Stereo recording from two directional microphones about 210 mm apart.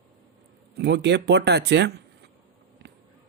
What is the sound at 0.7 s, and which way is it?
Speech, 50° right (ahead or behind).